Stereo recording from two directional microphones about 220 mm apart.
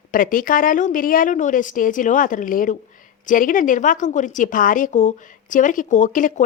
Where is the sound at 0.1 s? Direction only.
40° left (ahead or behind).